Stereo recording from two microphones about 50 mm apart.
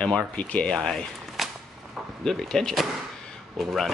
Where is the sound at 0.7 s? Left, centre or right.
Centre.